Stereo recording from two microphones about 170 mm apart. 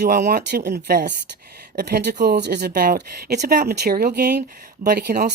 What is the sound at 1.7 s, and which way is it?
Speech, 70° right (ahead or behind).